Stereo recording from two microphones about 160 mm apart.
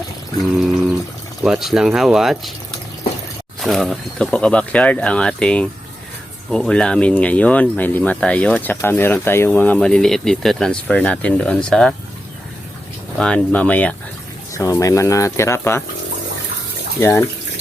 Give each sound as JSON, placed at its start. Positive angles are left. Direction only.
{"t": 1.5, "sound": "speech", "side_deg": 0}
{"t": 3.6, "sound": "speech", "side_deg": 0}
{"t": 13.1, "sound": "speech", "side_deg": 5}
{"t": 14.5, "sound": "speech", "side_deg": 20}
{"t": 17.0, "sound": "speech", "side_deg": 15}